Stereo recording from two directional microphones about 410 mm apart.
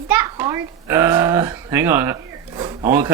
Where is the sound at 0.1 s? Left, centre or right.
Centre.